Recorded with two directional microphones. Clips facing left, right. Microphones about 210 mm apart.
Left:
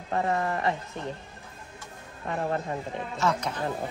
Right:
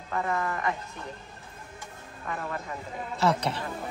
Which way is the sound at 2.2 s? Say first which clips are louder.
Left 6 dB; 35° left (ahead or behind).